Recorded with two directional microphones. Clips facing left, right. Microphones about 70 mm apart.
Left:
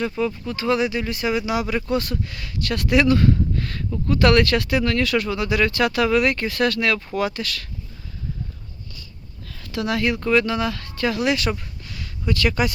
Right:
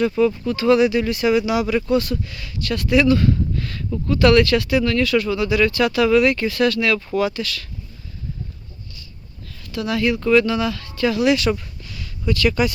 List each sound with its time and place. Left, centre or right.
0.4 s speech: left
3.5 s speech: left
9.6 s speech: left
10.2 s speech: left
11.8 s a sound: left
12.3 s speech: left